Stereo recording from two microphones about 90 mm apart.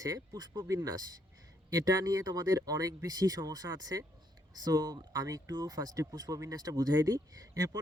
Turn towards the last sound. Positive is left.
turn(degrees=-45)  # may be behind; listen again after turning